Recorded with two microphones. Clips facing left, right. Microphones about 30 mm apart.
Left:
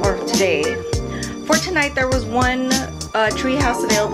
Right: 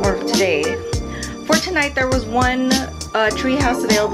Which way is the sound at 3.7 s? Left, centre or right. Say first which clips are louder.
Right 1 dB; centre.